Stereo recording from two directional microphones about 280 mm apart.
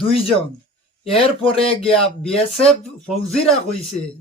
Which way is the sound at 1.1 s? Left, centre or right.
Centre.